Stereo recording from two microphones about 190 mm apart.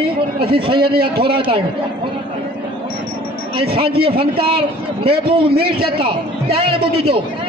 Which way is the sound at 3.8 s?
30° right (ahead or behind).